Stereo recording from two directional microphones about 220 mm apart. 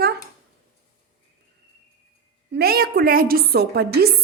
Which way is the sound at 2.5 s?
45° right (ahead or behind).